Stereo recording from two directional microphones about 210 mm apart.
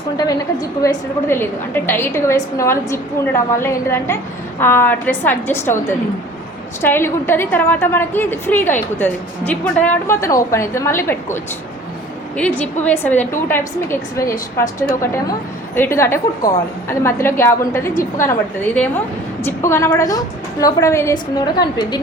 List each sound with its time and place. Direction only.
0.8 s a woman's voice: 15° left (ahead or behind)
6.8 s a woman's voice: 10° left (ahead or behind)
12.4 s a woman's voice: 5° left (ahead or behind)